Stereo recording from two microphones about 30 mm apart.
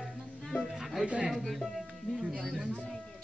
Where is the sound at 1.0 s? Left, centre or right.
Right.